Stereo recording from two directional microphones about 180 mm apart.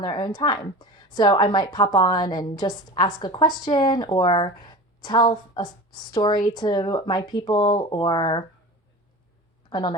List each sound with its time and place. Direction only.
0.0 s a woman's voice: 25° left (ahead or behind)
9.6 s speech: 25° left (ahead or behind)